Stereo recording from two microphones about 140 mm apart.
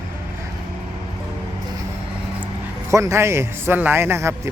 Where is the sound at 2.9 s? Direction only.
20° right (ahead or behind).